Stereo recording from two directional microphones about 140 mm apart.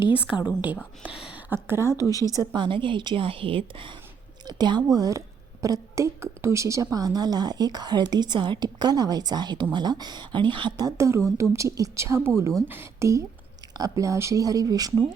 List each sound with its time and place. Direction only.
0.2 s a woman's voice: 10° right (ahead or behind)
1.5 s a woman's voice: 15° right (ahead or behind)
2.0 s speech: 25° left (ahead or behind)
2.4 s a woman's voice: 30° right (ahead or behind)